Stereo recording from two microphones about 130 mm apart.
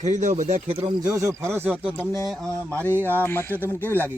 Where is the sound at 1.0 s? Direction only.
25° right (ahead or behind).